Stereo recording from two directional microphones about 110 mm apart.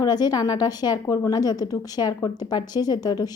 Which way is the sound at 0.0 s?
35° left (ahead or behind).